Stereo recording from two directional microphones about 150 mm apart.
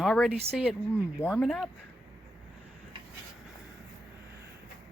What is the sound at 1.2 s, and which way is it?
Speech, 10° left (ahead or behind).